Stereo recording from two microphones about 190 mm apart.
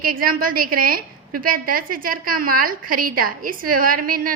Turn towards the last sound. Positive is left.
turn(degrees=-45)  # may be behind; listen again after turning